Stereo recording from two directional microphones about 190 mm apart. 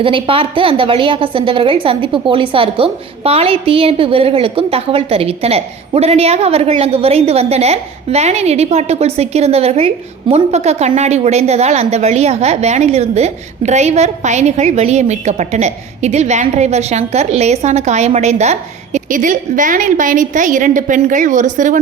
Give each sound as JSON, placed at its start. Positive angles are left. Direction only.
{"t": 0.0, "sound": "a woman's voice", "side_deg": -30}